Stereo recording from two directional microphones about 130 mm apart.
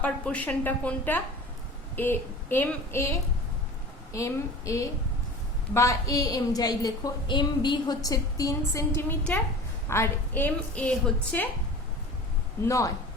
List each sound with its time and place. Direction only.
0.0 s a woman's voice: 10° left (ahead or behind)
12.6 s a woman's voice: 25° left (ahead or behind)